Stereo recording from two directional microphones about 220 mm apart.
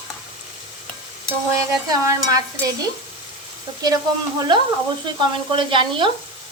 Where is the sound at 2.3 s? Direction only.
15° right (ahead or behind).